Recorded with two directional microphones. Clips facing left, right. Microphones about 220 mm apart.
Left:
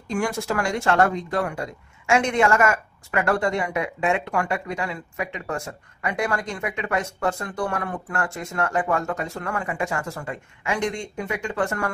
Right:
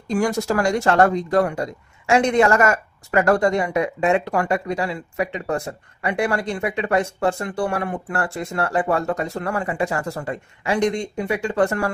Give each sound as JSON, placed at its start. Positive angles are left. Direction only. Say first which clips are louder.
{"t": 0.1, "sound": "speech", "louder": "right 5 dB", "side_deg": -40}